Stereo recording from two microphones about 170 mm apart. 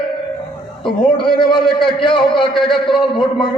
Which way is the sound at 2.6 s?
Centre (ahead or behind).